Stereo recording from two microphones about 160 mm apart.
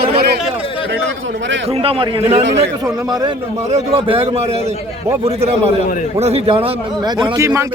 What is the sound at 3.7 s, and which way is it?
A man's voice, 35° right (ahead or behind).